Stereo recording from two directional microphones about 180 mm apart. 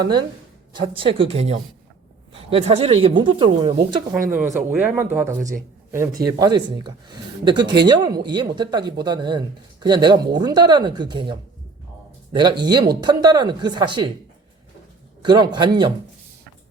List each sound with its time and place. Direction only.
0.0 s a woman's voice: 25° right (ahead or behind)
4.3 s speech: 10° right (ahead or behind)
12.4 s speech: 25° right (ahead or behind)
15.2 s speech: 25° right (ahead or behind)